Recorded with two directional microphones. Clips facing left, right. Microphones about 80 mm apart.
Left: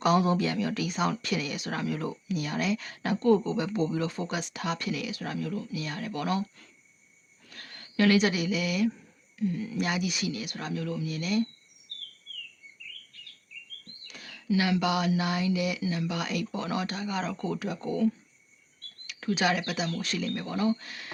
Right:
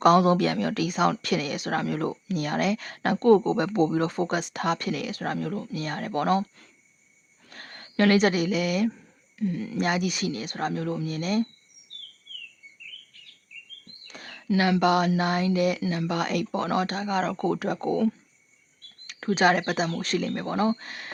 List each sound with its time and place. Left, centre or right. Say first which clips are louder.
0.0 s speech: right 6 dB; right
7.5 s speech: right 2 dB; right
9.4 s speech: right 2 dB; right
9.7 s speech: right 4 dB; right
14.1 s speech: right 2 dB; right
19.0 s speech: right 6 dB; right